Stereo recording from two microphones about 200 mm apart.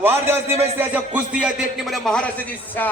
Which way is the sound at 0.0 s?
10° right (ahead or behind).